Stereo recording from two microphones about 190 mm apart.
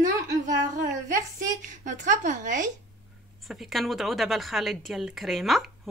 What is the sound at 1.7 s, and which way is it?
Speech, 40° right (ahead or behind).